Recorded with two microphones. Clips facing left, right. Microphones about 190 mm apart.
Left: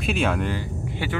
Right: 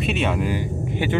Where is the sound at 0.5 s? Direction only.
15° right (ahead or behind).